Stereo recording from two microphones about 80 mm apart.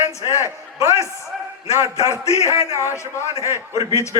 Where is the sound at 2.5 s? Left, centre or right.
Right.